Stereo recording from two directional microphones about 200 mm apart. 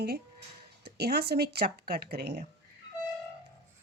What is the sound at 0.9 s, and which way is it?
Speech, 55° right (ahead or behind).